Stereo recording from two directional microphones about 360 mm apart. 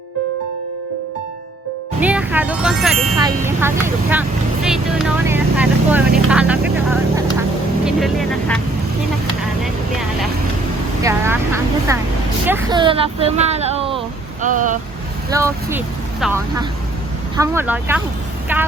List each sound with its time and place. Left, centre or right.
2.0 s speech: centre
7.9 s speech: centre
11.0 s speech: centre
15.3 s speech: centre